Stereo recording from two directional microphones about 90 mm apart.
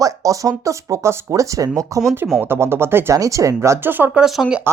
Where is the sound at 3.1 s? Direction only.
40° right (ahead or behind).